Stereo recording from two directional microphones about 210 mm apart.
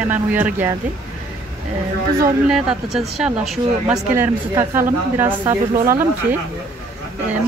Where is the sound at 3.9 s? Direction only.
15° right (ahead or behind).